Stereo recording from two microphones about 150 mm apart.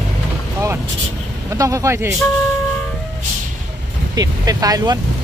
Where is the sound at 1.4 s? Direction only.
20° right (ahead or behind).